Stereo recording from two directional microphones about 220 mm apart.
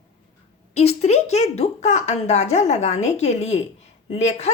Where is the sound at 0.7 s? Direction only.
30° left (ahead or behind).